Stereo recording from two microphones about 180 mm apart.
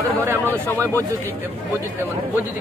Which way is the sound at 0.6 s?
15° right (ahead or behind).